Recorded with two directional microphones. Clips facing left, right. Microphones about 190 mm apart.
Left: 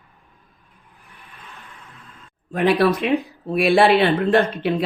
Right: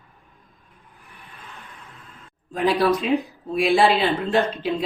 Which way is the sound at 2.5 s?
60° left (ahead or behind).